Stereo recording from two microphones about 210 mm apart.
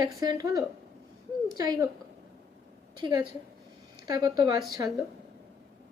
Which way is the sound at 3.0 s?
20° right (ahead or behind).